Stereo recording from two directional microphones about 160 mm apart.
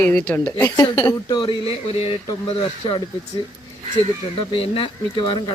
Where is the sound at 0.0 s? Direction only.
10° left (ahead or behind).